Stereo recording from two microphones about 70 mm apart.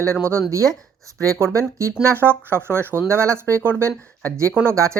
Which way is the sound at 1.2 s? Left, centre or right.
Right.